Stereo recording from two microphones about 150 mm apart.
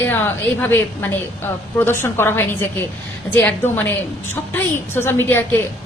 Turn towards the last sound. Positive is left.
turn(degrees=15)  # may be behind; listen again after turning